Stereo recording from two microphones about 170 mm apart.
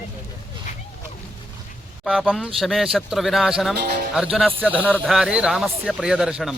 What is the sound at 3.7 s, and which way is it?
Speech, 70° right (ahead or behind).